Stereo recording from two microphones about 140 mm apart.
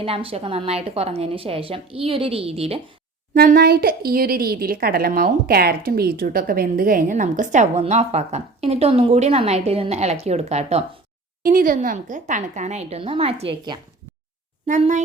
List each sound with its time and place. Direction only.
0.0 s a woman's voice: 45° right (ahead or behind)
3.3 s speech: 90° right; by 10.8 s 50° right (ahead or behind)
11.4 s a woman's voice: 80° right; by 13.7 s 40° right (ahead or behind)